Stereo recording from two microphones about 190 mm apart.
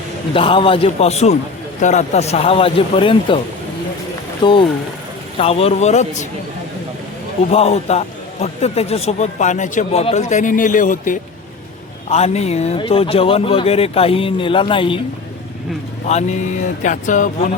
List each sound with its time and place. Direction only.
0.3 s a man's voice: 25° left (ahead or behind)
4.4 s a man's voice: 25° left (ahead or behind)
7.5 s a man's voice: 35° left (ahead or behind)
16.0 s a man's voice: 35° left (ahead or behind)